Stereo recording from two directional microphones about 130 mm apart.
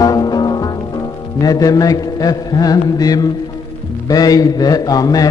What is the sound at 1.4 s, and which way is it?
A man's voice, 30° left (ahead or behind).